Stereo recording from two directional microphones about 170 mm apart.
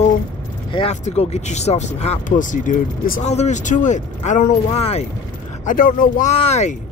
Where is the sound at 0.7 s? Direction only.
30° left (ahead or behind).